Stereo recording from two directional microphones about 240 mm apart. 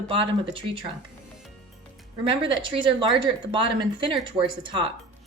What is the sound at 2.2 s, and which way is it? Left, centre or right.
A woman's voice, right.